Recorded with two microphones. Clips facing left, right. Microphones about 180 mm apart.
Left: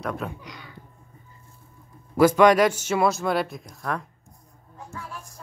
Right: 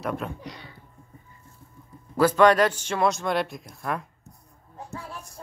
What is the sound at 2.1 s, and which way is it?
Speech, 10° left (ahead or behind).